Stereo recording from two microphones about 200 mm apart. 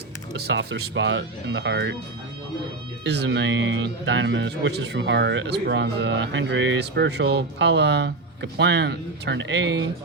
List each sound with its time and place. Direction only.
0.3 s speech: 55° right (ahead or behind)
3.0 s speech: 60° right (ahead or behind)